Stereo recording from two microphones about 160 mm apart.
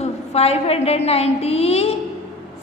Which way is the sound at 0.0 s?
40° left (ahead or behind).